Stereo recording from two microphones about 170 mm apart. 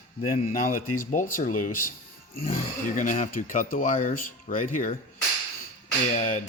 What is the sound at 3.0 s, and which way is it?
Speech, 50° left (ahead or behind).